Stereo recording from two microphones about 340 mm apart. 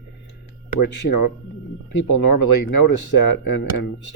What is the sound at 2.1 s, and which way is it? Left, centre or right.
Speech, left.